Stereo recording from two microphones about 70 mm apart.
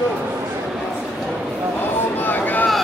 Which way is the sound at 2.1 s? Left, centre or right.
Left.